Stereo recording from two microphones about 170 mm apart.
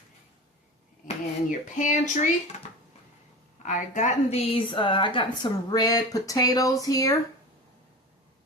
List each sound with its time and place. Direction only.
1.5 s speech: 50° left (ahead or behind)
3.6 s a woman's voice: 45° left (ahead or behind); by 7.2 s 20° left (ahead or behind)